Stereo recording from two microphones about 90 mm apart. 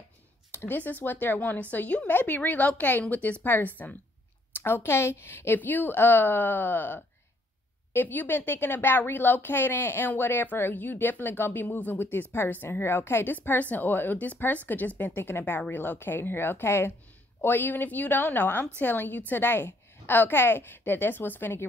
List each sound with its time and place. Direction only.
0.5 s a woman's voice: 25° left (ahead or behind)